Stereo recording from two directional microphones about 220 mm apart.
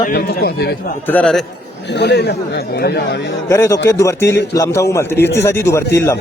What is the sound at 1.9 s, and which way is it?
Speech, 50° left (ahead or behind).